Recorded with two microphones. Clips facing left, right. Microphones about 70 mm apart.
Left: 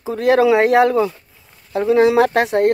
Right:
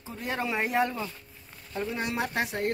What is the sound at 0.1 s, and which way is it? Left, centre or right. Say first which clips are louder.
Speech: left 18 dB; left.